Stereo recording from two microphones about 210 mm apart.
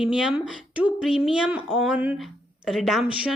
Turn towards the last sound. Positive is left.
turn(degrees=0)  # may be behind; listen again after turning